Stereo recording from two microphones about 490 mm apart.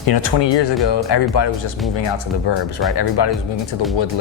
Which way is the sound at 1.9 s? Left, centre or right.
Left.